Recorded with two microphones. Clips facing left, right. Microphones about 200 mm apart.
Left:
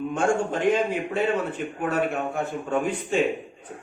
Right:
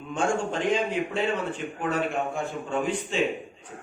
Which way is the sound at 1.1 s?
55° left (ahead or behind).